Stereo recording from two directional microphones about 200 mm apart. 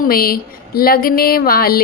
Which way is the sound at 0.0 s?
45° left (ahead or behind).